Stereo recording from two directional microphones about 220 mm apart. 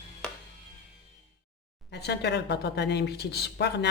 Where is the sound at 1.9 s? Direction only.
50° left (ahead or behind).